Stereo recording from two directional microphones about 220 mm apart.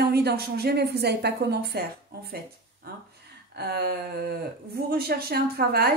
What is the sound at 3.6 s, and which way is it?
Speech, 45° right (ahead or behind).